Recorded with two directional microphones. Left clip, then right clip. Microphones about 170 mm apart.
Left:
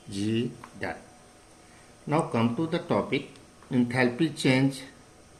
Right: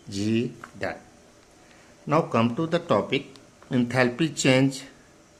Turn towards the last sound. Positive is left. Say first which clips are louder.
# right 4 dB
turn(degrees=-55)  # may be behind; listen again after turning